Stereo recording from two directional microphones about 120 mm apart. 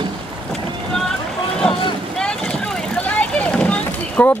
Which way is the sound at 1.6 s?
5° left (ahead or behind).